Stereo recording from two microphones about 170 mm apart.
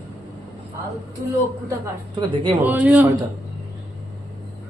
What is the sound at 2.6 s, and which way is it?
Speech, 10° right (ahead or behind).